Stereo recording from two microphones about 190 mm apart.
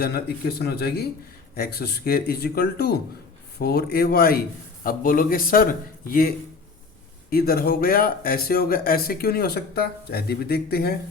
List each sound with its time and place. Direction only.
0.0 s speech: 55° left (ahead or behind)